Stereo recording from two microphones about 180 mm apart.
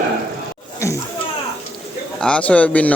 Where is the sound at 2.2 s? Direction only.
5° left (ahead or behind).